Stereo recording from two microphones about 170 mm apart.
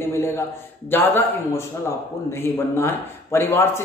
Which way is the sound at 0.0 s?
15° left (ahead or behind).